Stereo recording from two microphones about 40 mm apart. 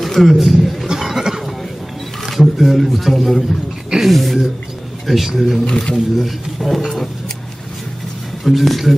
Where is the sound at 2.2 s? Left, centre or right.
Centre.